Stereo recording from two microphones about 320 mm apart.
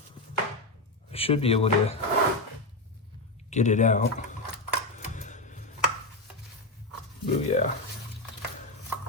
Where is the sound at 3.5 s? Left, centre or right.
Left.